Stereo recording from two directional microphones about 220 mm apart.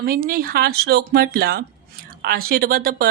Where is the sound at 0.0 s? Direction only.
40° right (ahead or behind).